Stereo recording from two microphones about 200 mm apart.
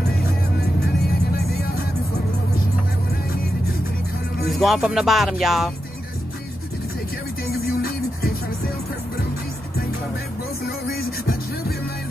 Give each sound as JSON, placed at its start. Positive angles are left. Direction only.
{"t": 4.5, "sound": "speech", "side_deg": 0}
{"t": 7.6, "sound": "music", "side_deg": 50}
{"t": 10.9, "sound": "music", "side_deg": 50}